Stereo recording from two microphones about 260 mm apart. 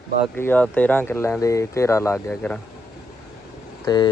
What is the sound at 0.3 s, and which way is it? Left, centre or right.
Speech, centre.